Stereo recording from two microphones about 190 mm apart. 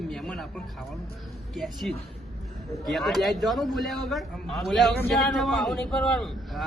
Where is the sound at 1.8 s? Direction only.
Centre (ahead or behind).